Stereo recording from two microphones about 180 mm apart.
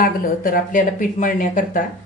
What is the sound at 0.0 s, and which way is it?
Speech, 50° left (ahead or behind).